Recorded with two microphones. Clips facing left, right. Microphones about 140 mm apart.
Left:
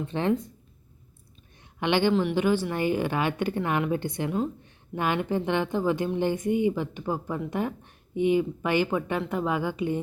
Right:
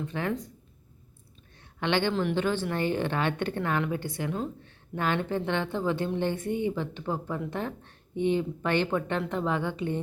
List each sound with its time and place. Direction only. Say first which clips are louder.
0.0 s speech: left 5 dB; 25° left (ahead or behind)
1.8 s speech: left 3 dB; 15° left (ahead or behind)